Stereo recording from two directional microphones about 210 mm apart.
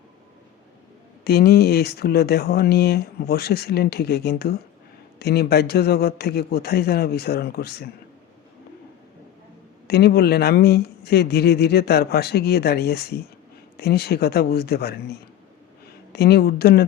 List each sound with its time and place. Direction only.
1.2 s speech: 50° left (ahead or behind)
9.8 s speech: 50° left (ahead or behind)
16.1 s speech: 50° left (ahead or behind)